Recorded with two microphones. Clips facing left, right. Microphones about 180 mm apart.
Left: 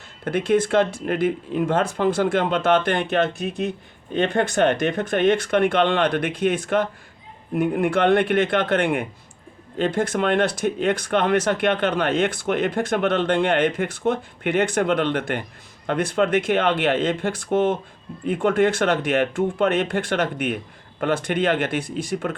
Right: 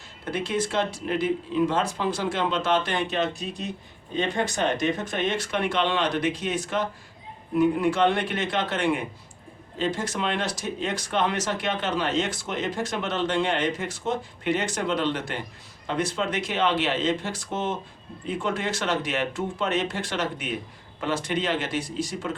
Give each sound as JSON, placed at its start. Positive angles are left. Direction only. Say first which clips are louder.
{"t": 0.3, "sound": "speech", "louder": "left 8 dB", "side_deg": 55}